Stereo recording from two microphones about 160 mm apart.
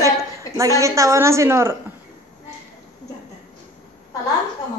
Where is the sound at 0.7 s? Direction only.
20° right (ahead or behind).